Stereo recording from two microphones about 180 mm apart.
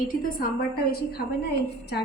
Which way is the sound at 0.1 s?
50° left (ahead or behind).